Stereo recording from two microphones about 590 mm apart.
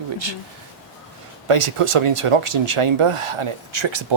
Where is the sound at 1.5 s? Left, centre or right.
Right.